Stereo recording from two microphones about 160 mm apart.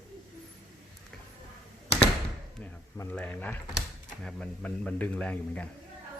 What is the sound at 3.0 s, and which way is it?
Speech, 10° left (ahead or behind).